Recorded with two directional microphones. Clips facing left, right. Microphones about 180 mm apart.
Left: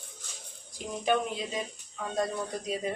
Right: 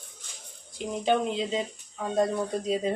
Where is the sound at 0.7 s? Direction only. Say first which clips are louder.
Right 3 dB; 25° right (ahead or behind).